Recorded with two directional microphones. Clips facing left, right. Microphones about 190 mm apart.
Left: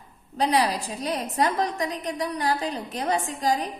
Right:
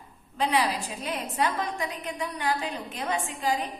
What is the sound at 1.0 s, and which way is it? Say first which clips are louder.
A woman's voice: left 4 dB; 40° left (ahead or behind).